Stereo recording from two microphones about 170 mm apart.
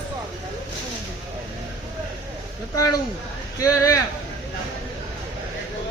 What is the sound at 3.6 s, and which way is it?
Speech, 15° left (ahead or behind).